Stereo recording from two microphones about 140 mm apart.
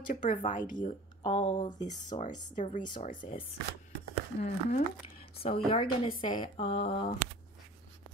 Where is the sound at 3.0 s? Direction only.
70° left (ahead or behind).